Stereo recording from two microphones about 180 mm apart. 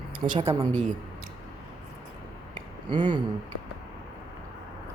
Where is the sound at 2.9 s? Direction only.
25° right (ahead or behind).